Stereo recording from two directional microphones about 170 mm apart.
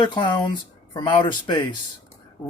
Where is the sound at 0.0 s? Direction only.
25° left (ahead or behind).